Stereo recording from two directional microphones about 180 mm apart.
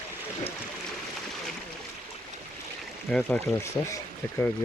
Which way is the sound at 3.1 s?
5° left (ahead or behind).